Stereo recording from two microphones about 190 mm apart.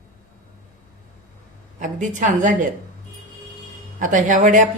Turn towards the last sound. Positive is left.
turn(degrees=-40)  # may be behind; listen again after turning